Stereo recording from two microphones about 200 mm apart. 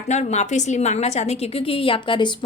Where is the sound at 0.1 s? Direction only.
35° left (ahead or behind).